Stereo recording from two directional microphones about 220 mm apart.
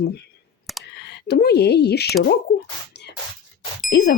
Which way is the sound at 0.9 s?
50° left (ahead or behind).